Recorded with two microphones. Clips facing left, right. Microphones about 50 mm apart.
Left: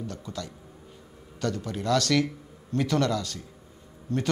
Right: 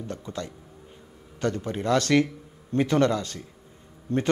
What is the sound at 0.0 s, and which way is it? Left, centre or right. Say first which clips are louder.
Speech: right 2 dB; right.